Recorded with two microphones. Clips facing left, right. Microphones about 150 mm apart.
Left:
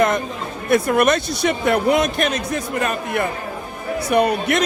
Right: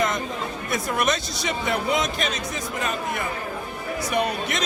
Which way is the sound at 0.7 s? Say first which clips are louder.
Left 9 dB; 60° left (ahead or behind).